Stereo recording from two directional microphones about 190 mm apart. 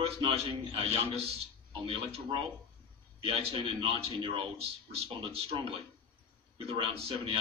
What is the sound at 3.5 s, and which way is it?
Speech, 30° right (ahead or behind).